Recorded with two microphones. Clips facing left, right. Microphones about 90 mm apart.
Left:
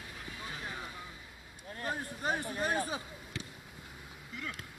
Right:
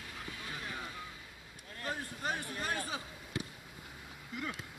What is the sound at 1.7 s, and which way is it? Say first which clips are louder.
Speech: left 2 dB; 30° left (ahead or behind).